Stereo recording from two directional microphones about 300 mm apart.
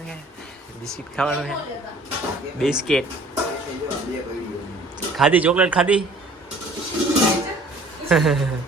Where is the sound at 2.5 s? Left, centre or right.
Centre.